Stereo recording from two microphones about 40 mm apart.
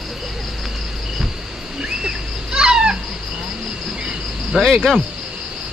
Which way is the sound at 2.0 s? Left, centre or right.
Centre.